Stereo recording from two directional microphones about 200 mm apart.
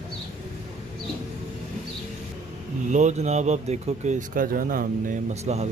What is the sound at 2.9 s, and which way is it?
Speech, 35° right (ahead or behind).